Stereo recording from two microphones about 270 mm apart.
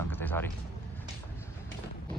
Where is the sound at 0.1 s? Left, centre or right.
Centre.